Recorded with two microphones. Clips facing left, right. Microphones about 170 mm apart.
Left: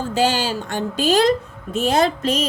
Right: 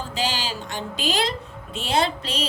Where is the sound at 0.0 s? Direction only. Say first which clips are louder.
Left 8 dB; 50° left (ahead or behind).